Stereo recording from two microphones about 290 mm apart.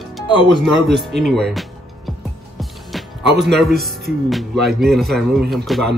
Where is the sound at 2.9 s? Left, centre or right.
Centre.